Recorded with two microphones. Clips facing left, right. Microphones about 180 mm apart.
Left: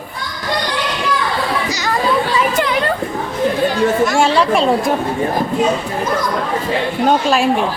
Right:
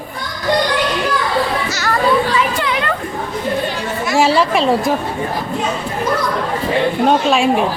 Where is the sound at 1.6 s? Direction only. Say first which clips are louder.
Left 1 dB; 15° left (ahead or behind).